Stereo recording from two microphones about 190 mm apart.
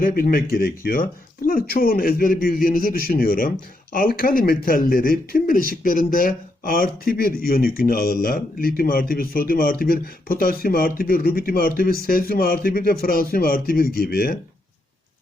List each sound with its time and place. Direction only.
0.0 s speech: 50° left (ahead or behind)